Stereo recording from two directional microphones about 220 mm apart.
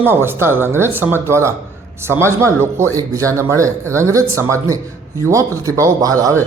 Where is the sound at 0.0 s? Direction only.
10° right (ahead or behind).